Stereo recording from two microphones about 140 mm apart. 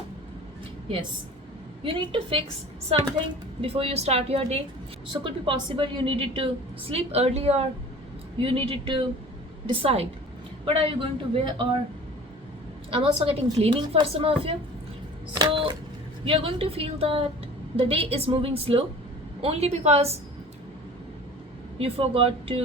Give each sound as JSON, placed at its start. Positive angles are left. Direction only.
{"t": 1.8, "sound": "a woman's voice", "side_deg": -40}
{"t": 3.6, "sound": "a woman's voice", "side_deg": -40}
{"t": 5.1, "sound": "a woman's voice", "side_deg": -35}
{"t": 12.9, "sound": "a woman's voice", "side_deg": -40}
{"t": 15.4, "sound": "a sound", "side_deg": -35}
{"t": 16.2, "sound": "a woman's voice", "side_deg": -40}
{"t": 21.8, "sound": "a woman's voice", "side_deg": -40}